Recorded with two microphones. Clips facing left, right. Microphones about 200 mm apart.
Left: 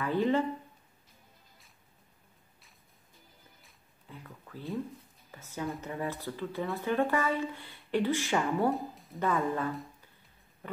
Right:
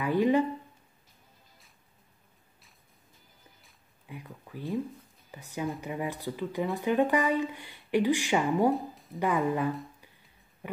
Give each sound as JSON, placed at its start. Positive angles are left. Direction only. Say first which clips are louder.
{"t": 0.0, "sound": "speech", "louder": "right 3 dB", "side_deg": -15}
{"t": 4.1, "sound": "speech", "louder": "right 4 dB", "side_deg": -15}
{"t": 8.7, "sound": "a woman's voice", "louder": "right 3 dB", "side_deg": 0}
{"t": 9.2, "sound": "speech", "louder": "right 3 dB", "side_deg": -15}
{"t": 10.6, "sound": "a sound", "louder": "right 3 dB", "side_deg": -10}